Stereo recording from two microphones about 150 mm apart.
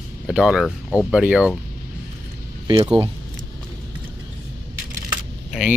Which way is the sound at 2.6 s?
30° right (ahead or behind).